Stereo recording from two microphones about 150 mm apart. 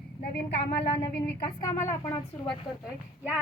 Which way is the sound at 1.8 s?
20° left (ahead or behind).